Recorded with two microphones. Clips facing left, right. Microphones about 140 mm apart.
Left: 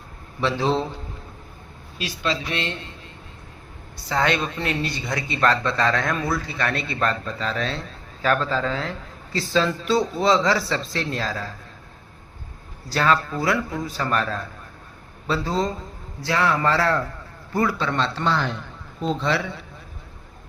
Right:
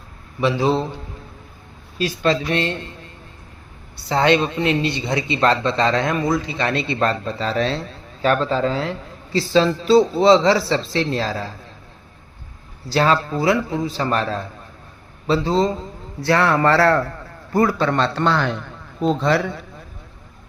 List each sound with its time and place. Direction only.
0.3 s a man's voice: 10° right (ahead or behind)
2.0 s speech: 50° right (ahead or behind)
4.1 s a man's voice: 30° right (ahead or behind)
12.9 s speech: 30° right (ahead or behind)
16.2 s a man's voice: 60° right (ahead or behind)
17.5 s a man's voice: 45° right (ahead or behind); by 18.5 s 65° right (ahead or behind)
19.0 s speech: 45° right (ahead or behind)